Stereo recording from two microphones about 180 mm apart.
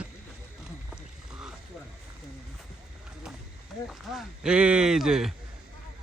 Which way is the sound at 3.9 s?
5° right (ahead or behind).